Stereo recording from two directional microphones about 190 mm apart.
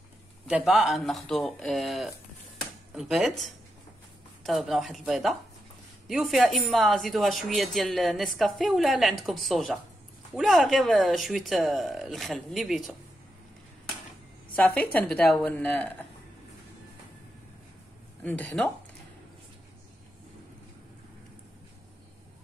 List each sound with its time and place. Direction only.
0.5 s speech: 5° right (ahead or behind)
14.5 s a woman's voice: 5° left (ahead or behind)
18.2 s speech: 5° left (ahead or behind)